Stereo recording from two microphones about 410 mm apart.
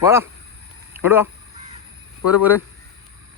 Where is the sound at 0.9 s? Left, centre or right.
Centre.